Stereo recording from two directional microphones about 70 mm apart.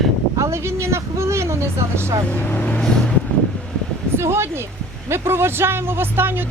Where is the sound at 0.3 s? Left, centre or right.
Right.